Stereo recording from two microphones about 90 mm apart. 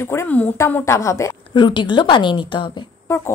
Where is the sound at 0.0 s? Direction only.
30° left (ahead or behind).